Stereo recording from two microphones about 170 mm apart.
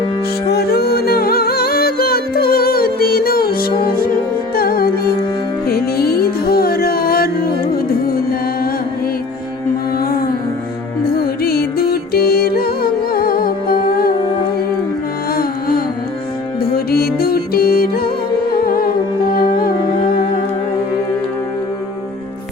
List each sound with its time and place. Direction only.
0.4 s music: 70° left (ahead or behind)
11.2 s music: 65° left (ahead or behind)
15.3 s carnatic music: 60° left (ahead or behind)
16.7 s music: 65° left (ahead or behind)